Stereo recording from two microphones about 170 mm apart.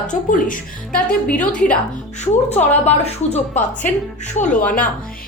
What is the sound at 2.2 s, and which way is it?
Speech, 40° left (ahead or behind).